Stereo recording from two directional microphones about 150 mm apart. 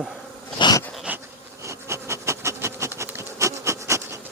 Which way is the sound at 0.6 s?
25° left (ahead or behind).